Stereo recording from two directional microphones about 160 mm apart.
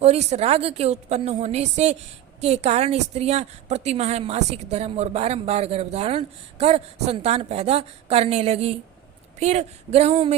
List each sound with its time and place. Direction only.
0.0 s a woman's voice: 40° right (ahead or behind)